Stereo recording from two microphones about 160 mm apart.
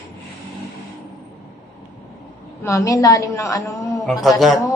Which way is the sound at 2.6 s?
20° left (ahead or behind).